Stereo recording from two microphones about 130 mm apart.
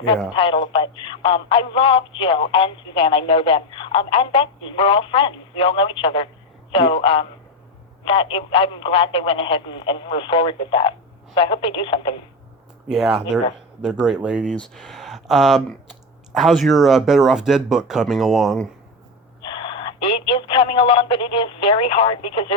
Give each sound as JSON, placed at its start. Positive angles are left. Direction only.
{"t": 0.3, "sound": "speech", "side_deg": 40}
{"t": 12.9, "sound": "speech", "side_deg": -5}
{"t": 14.5, "sound": "speech", "side_deg": 5}
{"t": 20.1, "sound": "speech", "side_deg": 45}